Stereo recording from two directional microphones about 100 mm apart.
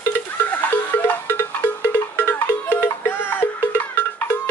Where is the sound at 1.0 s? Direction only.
20° left (ahead or behind).